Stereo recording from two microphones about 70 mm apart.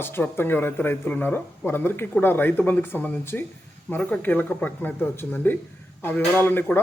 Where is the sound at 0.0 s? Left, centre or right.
Left.